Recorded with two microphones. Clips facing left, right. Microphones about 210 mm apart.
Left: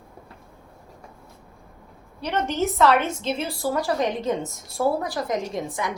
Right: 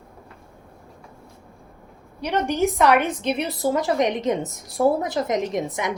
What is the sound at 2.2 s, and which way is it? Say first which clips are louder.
A woman's voice: right 3 dB; 15° right (ahead or behind).